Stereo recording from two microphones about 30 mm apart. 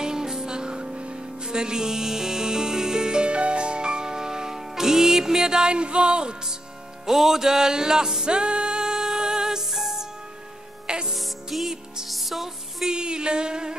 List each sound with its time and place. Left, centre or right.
0.0 s music: right
5.8 s music: right
7.1 s music: centre
10.9 s music: right
11.1 s music: centre
12.9 s music: right